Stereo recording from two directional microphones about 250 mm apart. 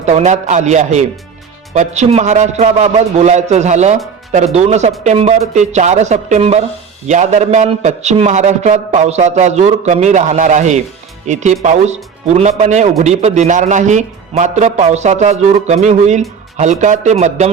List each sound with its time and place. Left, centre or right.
0.0 s a man's voice: right